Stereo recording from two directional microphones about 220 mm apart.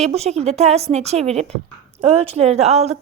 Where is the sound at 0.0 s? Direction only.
30° right (ahead or behind).